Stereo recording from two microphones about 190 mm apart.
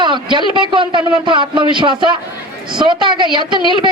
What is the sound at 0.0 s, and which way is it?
Speech, 25° right (ahead or behind).